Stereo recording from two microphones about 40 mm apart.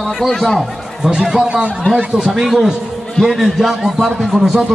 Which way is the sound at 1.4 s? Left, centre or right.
Right.